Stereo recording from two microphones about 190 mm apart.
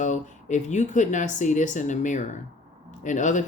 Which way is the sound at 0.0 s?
40° left (ahead or behind).